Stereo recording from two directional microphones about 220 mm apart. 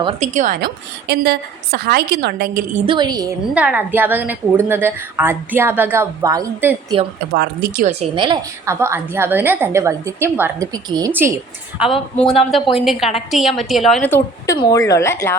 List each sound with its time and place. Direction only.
0.0 s a woman's voice: 35° right (ahead or behind)
2.7 s a woman's voice: 20° right (ahead or behind)
3.5 s a woman's voice: 5° right (ahead or behind)
7.3 s a woman's voice: 45° right (ahead or behind)
7.9 s a woman's voice: 30° right (ahead or behind); by 11.3 s 10° right (ahead or behind)
11.8 s a woman's voice: centre (ahead or behind)